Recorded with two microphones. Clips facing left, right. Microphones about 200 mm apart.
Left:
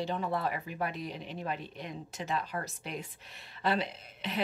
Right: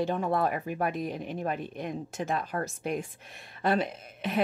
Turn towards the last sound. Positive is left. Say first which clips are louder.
# right 6 dB
turn(degrees=-50)  # may be behind; listen again after turning